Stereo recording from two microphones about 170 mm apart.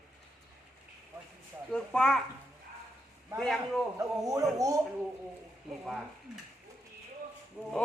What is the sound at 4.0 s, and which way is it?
Speech, 20° right (ahead or behind).